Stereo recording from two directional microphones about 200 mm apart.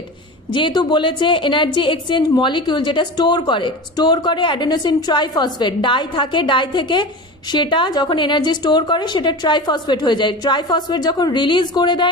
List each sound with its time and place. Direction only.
0.5 s a woman's voice: 20° left (ahead or behind)